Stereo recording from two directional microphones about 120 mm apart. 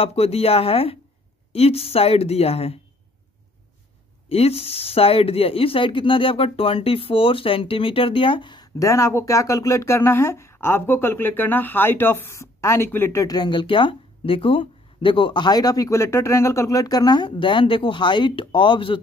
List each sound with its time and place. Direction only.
0.0 s a woman's voice: 55° left (ahead or behind)
4.3 s speech: 55° left (ahead or behind); by 8.6 s 40° left (ahead or behind)
8.7 s speech: 25° left (ahead or behind); by 18.9 s 45° left (ahead or behind)